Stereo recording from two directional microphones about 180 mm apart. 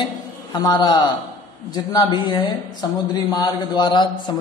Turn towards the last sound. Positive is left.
turn(degrees=25)  # may be behind; listen again after turning